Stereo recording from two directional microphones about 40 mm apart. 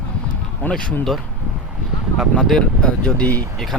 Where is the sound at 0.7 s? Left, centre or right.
Left.